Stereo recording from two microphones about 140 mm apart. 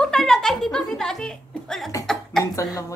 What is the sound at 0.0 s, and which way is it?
Chuckle, 5° left (ahead or behind).